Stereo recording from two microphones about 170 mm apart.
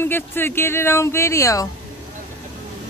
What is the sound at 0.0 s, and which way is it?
Speech, 15° left (ahead or behind).